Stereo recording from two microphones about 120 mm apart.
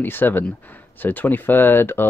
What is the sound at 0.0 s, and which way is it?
Speech, 15° left (ahead or behind).